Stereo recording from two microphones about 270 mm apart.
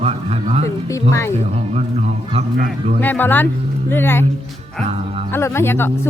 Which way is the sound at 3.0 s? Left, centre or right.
Centre.